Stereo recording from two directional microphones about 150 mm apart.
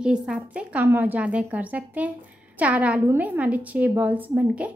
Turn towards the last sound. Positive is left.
turn(degrees=-10)  # may be behind; listen again after turning